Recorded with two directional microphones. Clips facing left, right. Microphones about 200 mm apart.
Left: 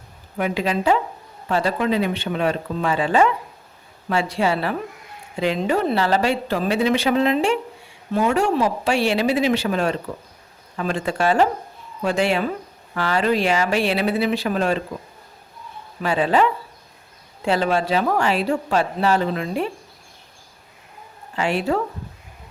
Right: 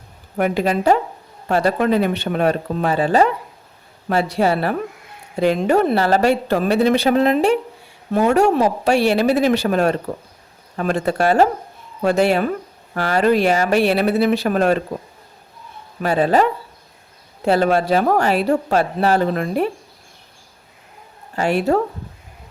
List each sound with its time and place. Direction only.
0.3 s speech: 50° right (ahead or behind)
4.4 s speech: 45° right (ahead or behind)
16.0 s a man's voice: 40° right (ahead or behind)
21.3 s speech: 45° right (ahead or behind)